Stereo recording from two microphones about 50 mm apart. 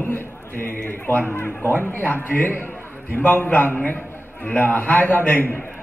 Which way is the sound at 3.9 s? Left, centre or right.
Left.